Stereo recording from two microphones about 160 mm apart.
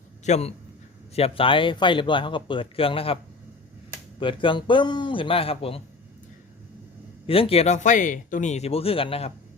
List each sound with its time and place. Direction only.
0.3 s speech: 40° left (ahead or behind)
4.2 s speech: 30° left (ahead or behind)
7.3 s speech: 35° left (ahead or behind)